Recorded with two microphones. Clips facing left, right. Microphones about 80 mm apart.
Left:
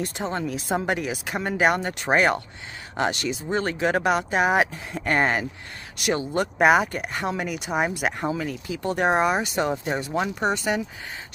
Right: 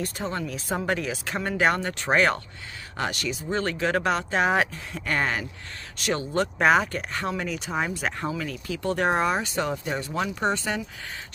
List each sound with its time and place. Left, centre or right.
0.0 s speech: left
4.9 s speech: left
5.9 s speech: centre